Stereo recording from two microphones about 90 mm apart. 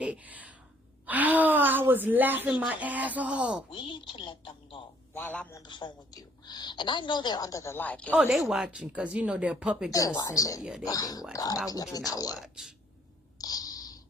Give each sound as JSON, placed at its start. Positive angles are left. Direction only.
{"t": 0.0, "sound": "speech", "side_deg": -15}
{"t": 3.7, "sound": "speech", "side_deg": 65}
{"t": 5.1, "sound": "speech", "side_deg": 20}
{"t": 5.6, "sound": "a woman's voice", "side_deg": 55}
{"t": 7.8, "sound": "speech", "side_deg": 15}
{"t": 8.3, "sound": "speech", "side_deg": -5}
{"t": 10.2, "sound": "speech", "side_deg": 40}
{"t": 10.6, "sound": "speech", "side_deg": -5}
{"t": 10.8, "sound": "a woman's voice", "side_deg": 40}
{"t": 12.4, "sound": "speech", "side_deg": -5}
{"t": 13.4, "sound": "a sound", "side_deg": 45}